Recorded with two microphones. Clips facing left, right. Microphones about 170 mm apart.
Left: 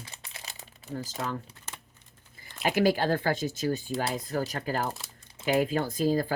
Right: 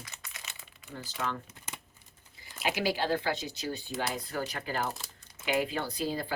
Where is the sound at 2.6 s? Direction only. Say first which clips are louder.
Left 6 dB; 50° left (ahead or behind).